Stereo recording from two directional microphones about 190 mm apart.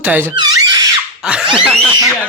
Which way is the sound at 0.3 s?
20° right (ahead or behind).